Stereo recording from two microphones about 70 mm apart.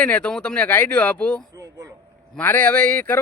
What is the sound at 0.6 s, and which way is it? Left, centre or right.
Speech, left.